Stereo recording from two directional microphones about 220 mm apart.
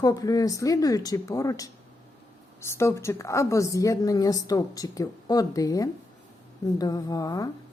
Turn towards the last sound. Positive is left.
turn(degrees=15)  # may be behind; listen again after turning